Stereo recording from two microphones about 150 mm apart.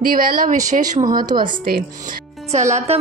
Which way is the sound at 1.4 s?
75° right (ahead or behind).